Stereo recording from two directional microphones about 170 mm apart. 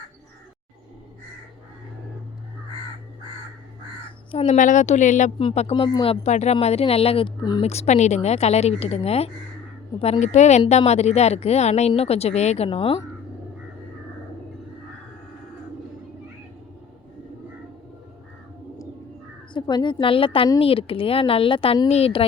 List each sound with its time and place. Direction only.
4.3 s a woman's voice: 40° left (ahead or behind)
5.4 s a woman's voice: 35° left (ahead or behind)
7.6 s a woman's voice: 40° left (ahead or behind)
19.5 s a woman's voice: 25° left (ahead or behind)